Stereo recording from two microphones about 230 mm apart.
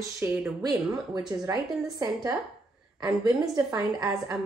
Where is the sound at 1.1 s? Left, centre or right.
Centre.